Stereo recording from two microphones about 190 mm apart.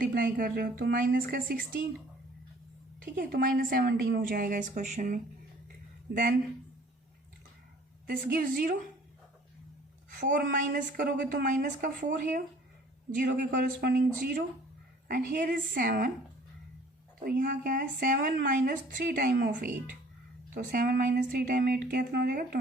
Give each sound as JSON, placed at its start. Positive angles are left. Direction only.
{"t": 0.0, "sound": "a woman's voice", "side_deg": -50}
{"t": 3.0, "sound": "a woman's voice", "side_deg": -50}
{"t": 6.1, "sound": "a woman's voice", "side_deg": -55}
{"t": 8.0, "sound": "a woman's voice", "side_deg": -45}
{"t": 10.1, "sound": "a woman's voice", "side_deg": -45}
{"t": 13.1, "sound": "a woman's voice", "side_deg": -45}
{"t": 17.2, "sound": "a woman's voice", "side_deg": -45}
{"t": 20.5, "sound": "a woman's voice", "side_deg": -45}